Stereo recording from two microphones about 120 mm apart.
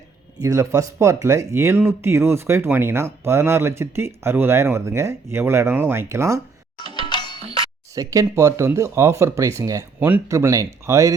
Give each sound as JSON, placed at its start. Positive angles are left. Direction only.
{"t": 0.3, "sound": "speech", "side_deg": -25}
{"t": 6.9, "sound": "music", "side_deg": 40}
{"t": 7.9, "sound": "speech", "side_deg": -30}
{"t": 10.0, "sound": "speech", "side_deg": -15}
{"t": 10.3, "sound": "speech", "side_deg": -25}